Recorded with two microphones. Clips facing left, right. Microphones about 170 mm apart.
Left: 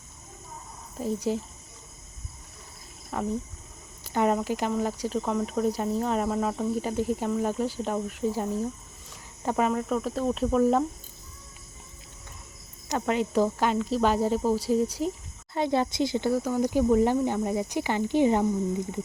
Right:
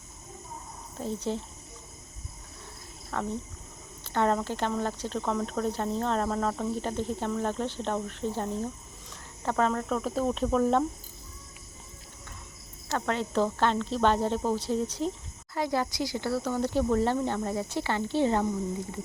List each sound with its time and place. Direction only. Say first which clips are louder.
0.9 s speech: left 4 dB; 10° left (ahead or behind)
3.1 s speech: left 3 dB; 10° left (ahead or behind)
12.9 s speech: left 3 dB; 15° left (ahead or behind)
15.5 s speech: left 4 dB; 25° left (ahead or behind)